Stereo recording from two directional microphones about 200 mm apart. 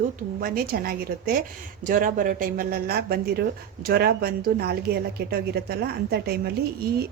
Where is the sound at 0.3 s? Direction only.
45° right (ahead or behind).